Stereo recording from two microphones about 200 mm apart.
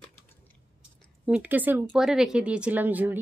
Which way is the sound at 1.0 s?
5° right (ahead or behind).